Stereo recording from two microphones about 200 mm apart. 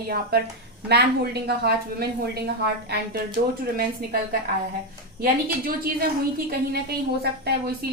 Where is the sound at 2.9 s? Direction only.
55° right (ahead or behind).